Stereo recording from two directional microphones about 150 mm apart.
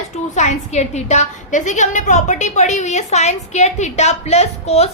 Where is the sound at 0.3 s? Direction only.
50° left (ahead or behind).